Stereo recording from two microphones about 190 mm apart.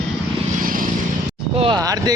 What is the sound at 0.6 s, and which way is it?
Vehicle, 45° right (ahead or behind).